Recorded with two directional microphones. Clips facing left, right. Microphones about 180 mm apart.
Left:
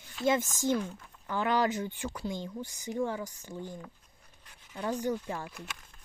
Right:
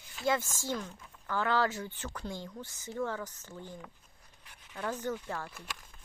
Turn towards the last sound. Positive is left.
turn(degrees=15)  # may be behind; listen again after turning